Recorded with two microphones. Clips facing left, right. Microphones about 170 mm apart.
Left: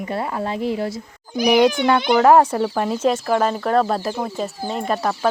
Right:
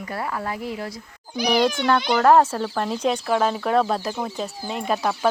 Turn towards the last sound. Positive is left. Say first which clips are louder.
# left 1 dB
turn(degrees=0)  # may be behind; listen again after turning